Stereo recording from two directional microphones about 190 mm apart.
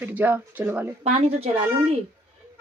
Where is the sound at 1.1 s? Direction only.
35° right (ahead or behind).